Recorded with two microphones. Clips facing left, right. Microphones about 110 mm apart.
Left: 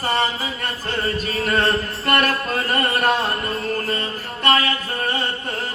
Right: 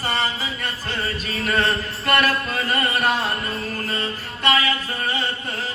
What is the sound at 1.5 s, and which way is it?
Mantra, 50° left (ahead or behind).